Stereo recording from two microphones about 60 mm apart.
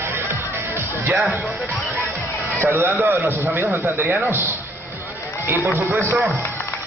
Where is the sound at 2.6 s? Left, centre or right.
Right.